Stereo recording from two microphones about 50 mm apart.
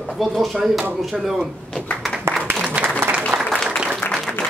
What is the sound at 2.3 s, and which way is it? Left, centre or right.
Applause, right.